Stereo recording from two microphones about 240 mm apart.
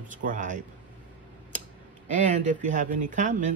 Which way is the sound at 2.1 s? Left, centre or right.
Right.